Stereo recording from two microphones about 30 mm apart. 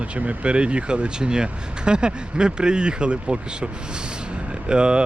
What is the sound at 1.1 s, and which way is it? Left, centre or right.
Speech, right.